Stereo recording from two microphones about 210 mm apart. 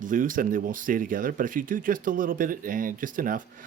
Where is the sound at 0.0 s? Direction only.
40° right (ahead or behind).